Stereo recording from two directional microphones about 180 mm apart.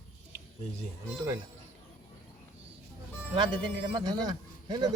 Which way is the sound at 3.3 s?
25° right (ahead or behind).